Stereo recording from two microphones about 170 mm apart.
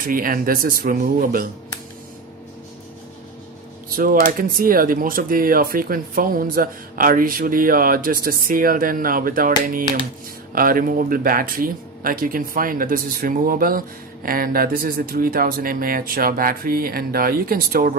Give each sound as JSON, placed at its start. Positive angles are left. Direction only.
{"t": 0.0, "sound": "speech", "side_deg": -55}
{"t": 3.9, "sound": "speech", "side_deg": -55}